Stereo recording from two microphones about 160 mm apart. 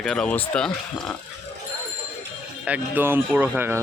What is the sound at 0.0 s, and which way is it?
A man's voice, 5° left (ahead or behind).